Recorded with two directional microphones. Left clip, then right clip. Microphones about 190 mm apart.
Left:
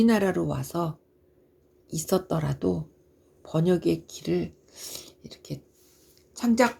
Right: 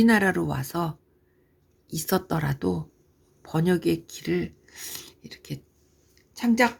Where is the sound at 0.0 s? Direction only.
25° right (ahead or behind).